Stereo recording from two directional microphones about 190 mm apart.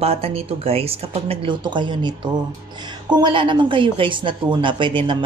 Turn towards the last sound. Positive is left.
turn(degrees=-25)  # may be behind; listen again after turning